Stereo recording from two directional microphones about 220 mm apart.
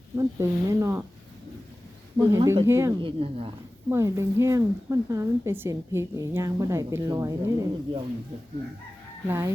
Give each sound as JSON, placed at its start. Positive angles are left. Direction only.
{"t": 0.2, "sound": "a woman's voice", "side_deg": -15}
{"t": 2.1, "sound": "a woman's voice", "side_deg": -20}
{"t": 3.0, "sound": "a woman's voice", "side_deg": -25}
{"t": 3.8, "sound": "a woman's voice", "side_deg": -10}
{"t": 9.2, "sound": "a woman's voice", "side_deg": -10}